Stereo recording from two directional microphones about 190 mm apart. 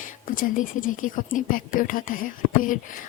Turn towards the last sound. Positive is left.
turn(degrees=45)  # may be behind; listen again after turning